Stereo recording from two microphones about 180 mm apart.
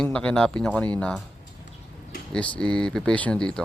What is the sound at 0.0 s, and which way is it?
Speech, 5° left (ahead or behind).